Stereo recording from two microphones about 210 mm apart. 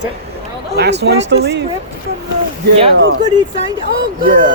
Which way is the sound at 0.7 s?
55° right (ahead or behind).